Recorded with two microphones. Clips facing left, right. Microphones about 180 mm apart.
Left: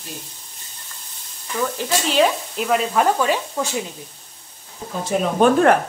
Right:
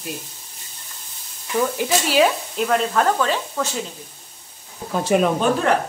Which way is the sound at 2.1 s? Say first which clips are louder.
Left 1 dB; 5° right (ahead or behind).